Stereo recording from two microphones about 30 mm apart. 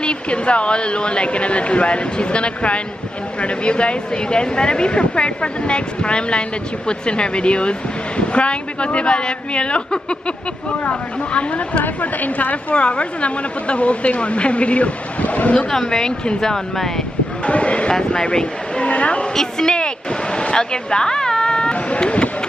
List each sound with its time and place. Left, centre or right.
0.0 s speech: left
10.9 s a woman's voice: left
11.8 s a woman's voice: left
12.7 s a woman's voice: left
15.7 s speech: left
17.5 s a woman's voice: left
17.9 s speech: left
18.9 s a woman's voice: left
19.6 s speech: left
20.3 s cat: left